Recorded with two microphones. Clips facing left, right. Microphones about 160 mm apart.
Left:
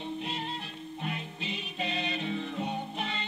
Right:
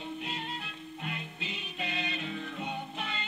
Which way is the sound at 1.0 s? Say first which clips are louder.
Left 3 dB; 30° left (ahead or behind).